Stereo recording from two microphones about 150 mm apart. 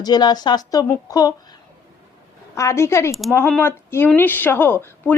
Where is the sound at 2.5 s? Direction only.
20° left (ahead or behind).